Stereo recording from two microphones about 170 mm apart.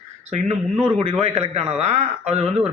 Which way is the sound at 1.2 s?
40° right (ahead or behind).